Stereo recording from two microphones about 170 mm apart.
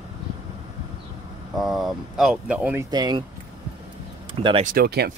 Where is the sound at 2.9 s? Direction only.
25° right (ahead or behind).